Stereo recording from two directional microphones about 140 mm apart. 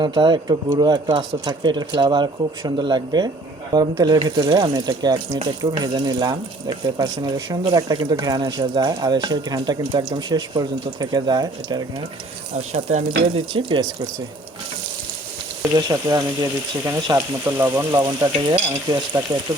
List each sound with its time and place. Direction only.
0.0 s speech: 35° right (ahead or behind)
3.7 s frying: 30° right (ahead or behind)
12.7 s speech: 50° right (ahead or behind)
15.6 s frying: 25° right (ahead or behind)